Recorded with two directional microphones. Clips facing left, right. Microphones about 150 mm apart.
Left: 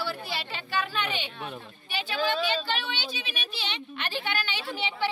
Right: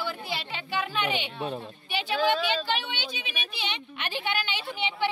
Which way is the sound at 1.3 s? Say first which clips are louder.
Right 6 dB; 30° right (ahead or behind).